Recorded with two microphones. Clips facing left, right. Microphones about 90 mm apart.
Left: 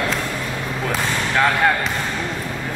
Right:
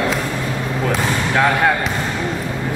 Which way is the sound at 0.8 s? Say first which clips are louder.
Right 3 dB; 5° right (ahead or behind).